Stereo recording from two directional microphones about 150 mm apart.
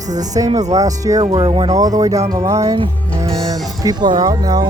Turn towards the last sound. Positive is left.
turn(degrees=-25)  # may be behind; listen again after turning